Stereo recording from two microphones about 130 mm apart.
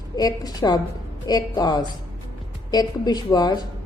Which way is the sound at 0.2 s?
30° left (ahead or behind).